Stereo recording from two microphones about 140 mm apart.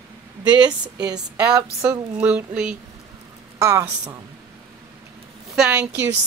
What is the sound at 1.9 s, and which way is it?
Speech, 10° right (ahead or behind).